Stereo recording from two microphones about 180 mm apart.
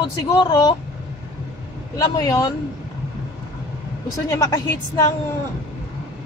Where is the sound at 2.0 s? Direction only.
20° left (ahead or behind).